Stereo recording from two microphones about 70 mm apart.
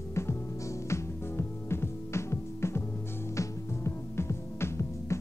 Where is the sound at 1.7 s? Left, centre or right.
Left.